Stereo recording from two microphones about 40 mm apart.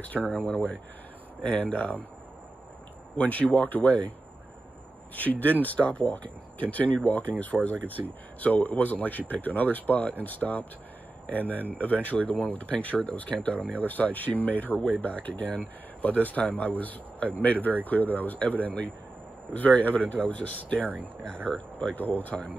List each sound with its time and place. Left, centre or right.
0.0 s speech: left
1.4 s speech: left
3.2 s speech: left
5.1 s speech: left
19.5 s speech: left
21.5 s speech: left
21.9 s speech: left